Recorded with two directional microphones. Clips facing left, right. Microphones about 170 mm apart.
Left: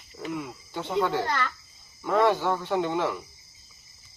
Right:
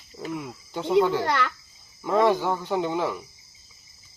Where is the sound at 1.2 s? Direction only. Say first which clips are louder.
Right 4 dB; 75° right (ahead or behind).